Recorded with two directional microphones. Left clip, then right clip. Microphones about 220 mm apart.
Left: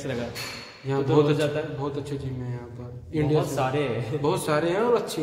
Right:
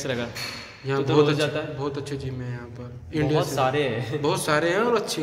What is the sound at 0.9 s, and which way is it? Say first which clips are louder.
A man's voice: right 1 dB; 5° left (ahead or behind).